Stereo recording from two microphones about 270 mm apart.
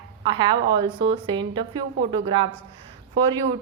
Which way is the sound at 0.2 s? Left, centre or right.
Centre.